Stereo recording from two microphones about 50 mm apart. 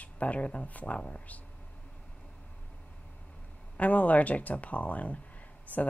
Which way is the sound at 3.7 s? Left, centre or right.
Left.